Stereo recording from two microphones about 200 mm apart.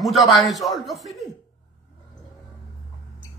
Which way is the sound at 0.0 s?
Centre (ahead or behind).